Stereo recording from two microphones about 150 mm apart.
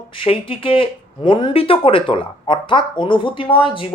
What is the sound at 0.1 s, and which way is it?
Speech, 35° left (ahead or behind).